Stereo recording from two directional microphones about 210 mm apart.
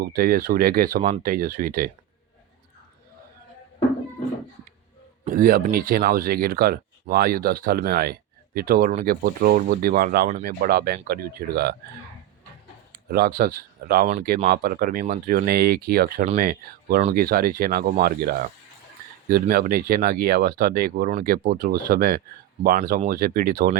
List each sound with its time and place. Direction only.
0.0 s speech: 45° right (ahead or behind)
5.2 s speech: 40° right (ahead or behind)
12.9 s speech: 45° right (ahead or behind)